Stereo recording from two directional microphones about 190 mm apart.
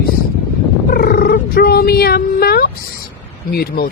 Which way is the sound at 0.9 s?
50° left (ahead or behind).